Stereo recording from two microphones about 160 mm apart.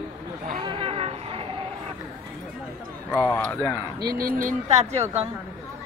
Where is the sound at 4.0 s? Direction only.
70° right (ahead or behind).